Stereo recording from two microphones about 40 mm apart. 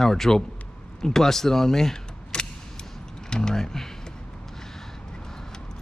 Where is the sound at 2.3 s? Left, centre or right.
Left.